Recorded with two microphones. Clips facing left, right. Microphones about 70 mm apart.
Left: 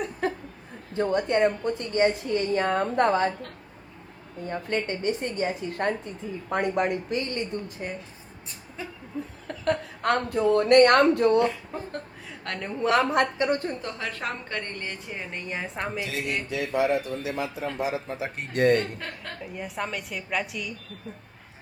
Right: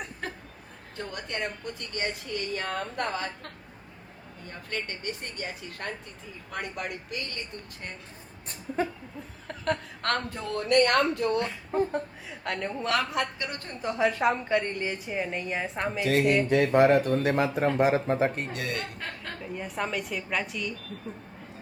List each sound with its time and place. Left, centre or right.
0.9 s a woman's voice: left
4.4 s a woman's voice: left
9.5 s a woman's voice: centre
10.6 s speech: left
11.7 s a woman's voice: centre
12.9 s a woman's voice: left
13.8 s a woman's voice: centre
16.5 s speech: right
18.5 s speech: left
18.8 s a woman's voice: centre